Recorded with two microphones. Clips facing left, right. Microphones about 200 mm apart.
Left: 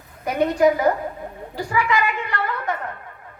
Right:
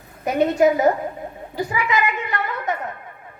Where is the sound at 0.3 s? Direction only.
25° right (ahead or behind).